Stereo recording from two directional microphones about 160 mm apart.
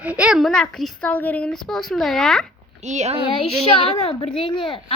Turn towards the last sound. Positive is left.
turn(degrees=30)  # may be behind; listen again after turning